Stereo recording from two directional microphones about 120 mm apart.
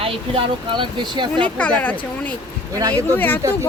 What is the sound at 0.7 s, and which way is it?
Speech, 40° right (ahead or behind).